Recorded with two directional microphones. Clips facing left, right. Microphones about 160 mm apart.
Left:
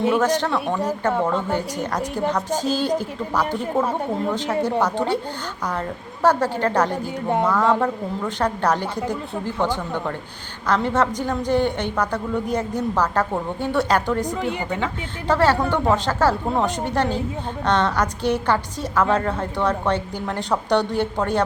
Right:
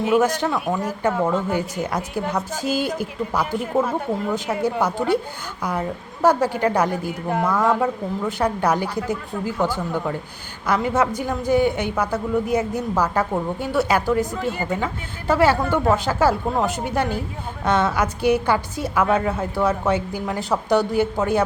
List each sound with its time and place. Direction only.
0.1 s a woman's voice: 10° right (ahead or behind)
6.2 s a woman's voice: 10° right (ahead or behind)
14.3 s speech: 15° left (ahead or behind)
15.3 s a woman's voice: 10° right (ahead or behind)